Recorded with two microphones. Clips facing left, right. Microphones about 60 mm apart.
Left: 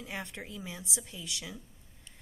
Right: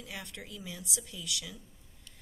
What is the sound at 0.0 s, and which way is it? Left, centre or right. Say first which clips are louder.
A woman's voice: left 4 dB; left.